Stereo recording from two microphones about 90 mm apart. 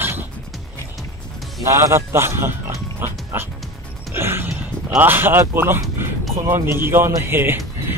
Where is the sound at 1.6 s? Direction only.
30° right (ahead or behind).